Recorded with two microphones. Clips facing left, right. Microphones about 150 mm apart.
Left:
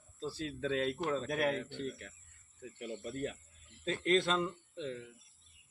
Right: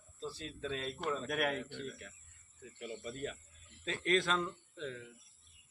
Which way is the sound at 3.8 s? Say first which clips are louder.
Left 3 dB; 30° left (ahead or behind).